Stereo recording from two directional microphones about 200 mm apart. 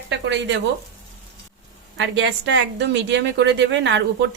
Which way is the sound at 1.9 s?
65° right (ahead or behind).